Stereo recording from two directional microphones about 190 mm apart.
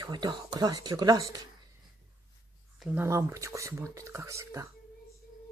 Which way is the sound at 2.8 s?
10° right (ahead or behind).